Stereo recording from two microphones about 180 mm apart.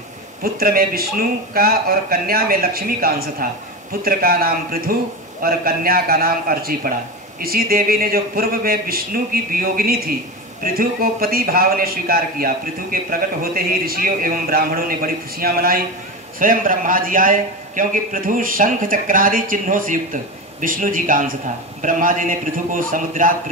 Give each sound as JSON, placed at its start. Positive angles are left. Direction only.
{"t": 0.4, "sound": "a man's voice", "side_deg": -55}